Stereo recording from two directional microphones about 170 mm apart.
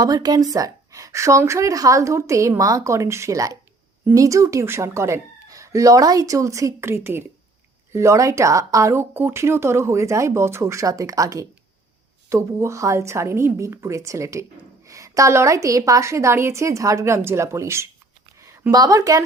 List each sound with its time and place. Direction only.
0.0 s a woman's voice: 20° right (ahead or behind)